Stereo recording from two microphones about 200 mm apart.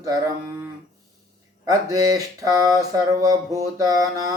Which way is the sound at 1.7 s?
20° right (ahead or behind).